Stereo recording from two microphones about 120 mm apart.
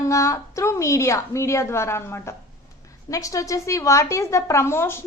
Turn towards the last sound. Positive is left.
turn(degrees=20)  # may be behind; listen again after turning